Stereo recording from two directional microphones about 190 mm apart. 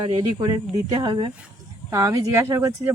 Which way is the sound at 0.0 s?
20° right (ahead or behind).